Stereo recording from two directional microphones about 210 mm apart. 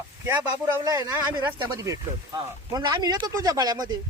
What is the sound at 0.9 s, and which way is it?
Speech, 15° right (ahead or behind).